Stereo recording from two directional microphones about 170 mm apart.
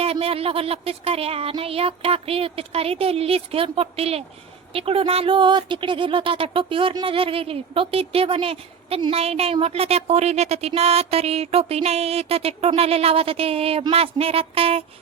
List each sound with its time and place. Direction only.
0.0 s speech: 35° right (ahead or behind)